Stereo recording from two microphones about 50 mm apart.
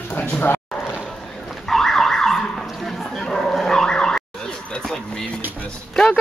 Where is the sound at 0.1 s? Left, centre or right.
Left.